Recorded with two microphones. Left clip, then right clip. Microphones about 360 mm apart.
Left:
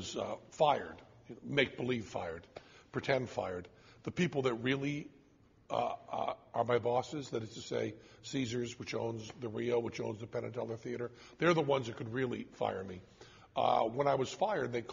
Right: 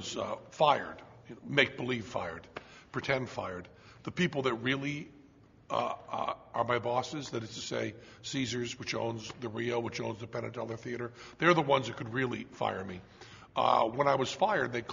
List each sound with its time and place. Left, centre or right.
0.1 s a man's voice: left
2.9 s a man's voice: left